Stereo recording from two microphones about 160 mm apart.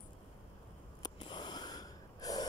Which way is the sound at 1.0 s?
30° left (ahead or behind).